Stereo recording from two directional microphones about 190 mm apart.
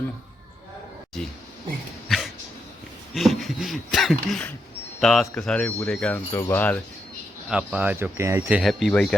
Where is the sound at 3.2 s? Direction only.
Centre (ahead or behind).